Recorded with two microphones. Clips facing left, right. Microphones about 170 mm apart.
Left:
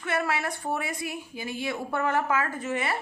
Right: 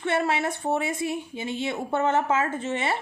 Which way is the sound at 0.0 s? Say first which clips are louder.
Right 4 dB; 25° right (ahead or behind).